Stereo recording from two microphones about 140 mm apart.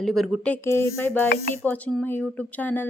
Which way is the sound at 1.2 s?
90° left.